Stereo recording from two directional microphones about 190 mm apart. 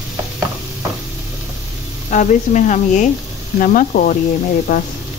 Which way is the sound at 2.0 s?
40° left (ahead or behind).